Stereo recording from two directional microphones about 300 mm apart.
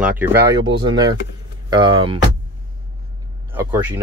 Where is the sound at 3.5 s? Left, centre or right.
Centre.